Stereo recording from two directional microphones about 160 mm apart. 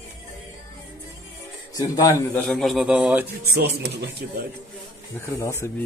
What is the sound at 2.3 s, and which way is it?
Speech, 5° left (ahead or behind).